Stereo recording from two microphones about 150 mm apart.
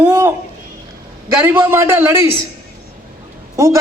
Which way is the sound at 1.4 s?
15° right (ahead or behind).